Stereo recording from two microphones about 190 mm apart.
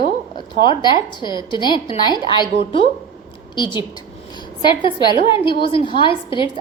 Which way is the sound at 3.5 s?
25° left (ahead or behind).